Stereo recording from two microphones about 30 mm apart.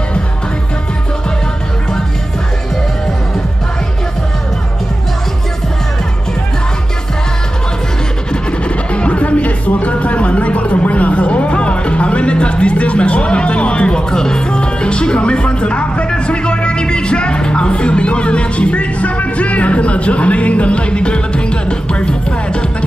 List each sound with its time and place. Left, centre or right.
8.6 s music: left
9.2 s a sound: left
14.6 s music: left